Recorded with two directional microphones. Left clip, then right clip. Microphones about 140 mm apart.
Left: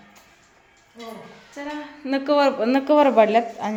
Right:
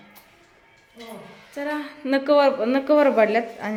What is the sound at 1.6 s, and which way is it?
Speech, 45° right (ahead or behind).